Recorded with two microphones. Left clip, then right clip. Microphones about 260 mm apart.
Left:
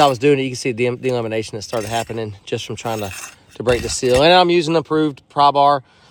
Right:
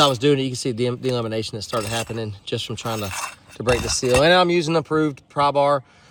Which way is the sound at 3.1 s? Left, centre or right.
Centre.